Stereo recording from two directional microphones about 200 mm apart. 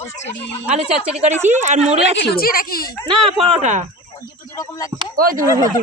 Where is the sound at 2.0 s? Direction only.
55° left (ahead or behind).